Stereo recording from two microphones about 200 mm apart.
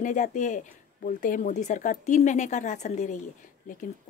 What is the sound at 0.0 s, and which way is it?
Speech, 40° left (ahead or behind).